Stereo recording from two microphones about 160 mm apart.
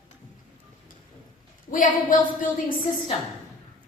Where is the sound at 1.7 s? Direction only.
55° left (ahead or behind).